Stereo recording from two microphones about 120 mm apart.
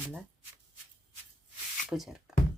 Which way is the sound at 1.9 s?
5° right (ahead or behind).